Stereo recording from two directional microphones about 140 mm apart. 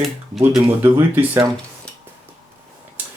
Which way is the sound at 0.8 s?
15° right (ahead or behind).